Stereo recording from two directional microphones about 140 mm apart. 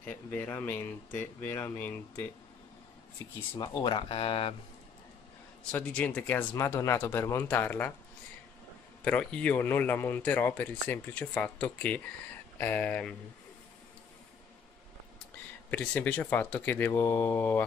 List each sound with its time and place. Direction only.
0.0 s speech: 10° left (ahead or behind)
3.5 s speech: 30° left (ahead or behind)
5.6 s speech: 10° left (ahead or behind)
9.0 s speech: 10° left (ahead or behind)
15.7 s speech: 10° left (ahead or behind)